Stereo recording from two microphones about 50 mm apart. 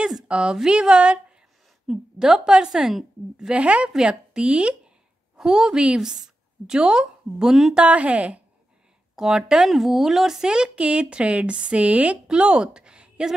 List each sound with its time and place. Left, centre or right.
0.3 s a woman's voice: centre
1.9 s a woman's voice: centre
3.4 s a woman's voice: right
7.7 s a woman's voice: right
9.1 s a woman's voice: centre